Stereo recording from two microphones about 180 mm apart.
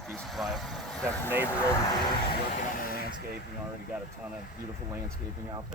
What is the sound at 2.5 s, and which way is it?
Vehicle, 50° left (ahead or behind).